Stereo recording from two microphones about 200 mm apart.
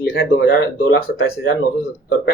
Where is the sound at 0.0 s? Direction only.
55° left (ahead or behind).